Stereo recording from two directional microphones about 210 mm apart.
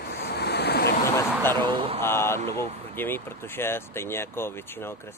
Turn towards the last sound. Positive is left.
turn(degrees=10)  # may be behind; listen again after turning